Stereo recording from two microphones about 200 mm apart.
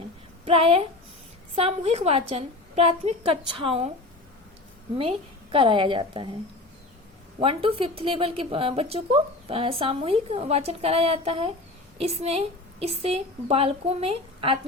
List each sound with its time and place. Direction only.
0.4 s a woman's voice: 30° right (ahead or behind)
4.9 s a woman's voice: 25° right (ahead or behind)
7.3 s a woman's voice: 30° right (ahead or behind)